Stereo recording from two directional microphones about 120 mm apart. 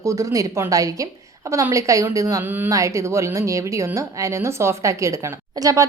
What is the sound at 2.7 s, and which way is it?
Speech, 25° right (ahead or behind).